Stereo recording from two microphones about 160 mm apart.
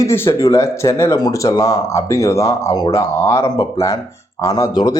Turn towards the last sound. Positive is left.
turn(degrees=25)  # may be behind; listen again after turning